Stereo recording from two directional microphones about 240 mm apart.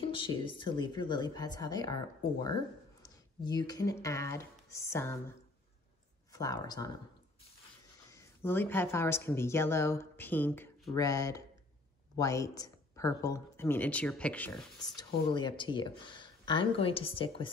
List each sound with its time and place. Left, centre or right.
0.1 s speech: centre
6.3 s speech: centre
8.1 s speech: centre
15.0 s speech: centre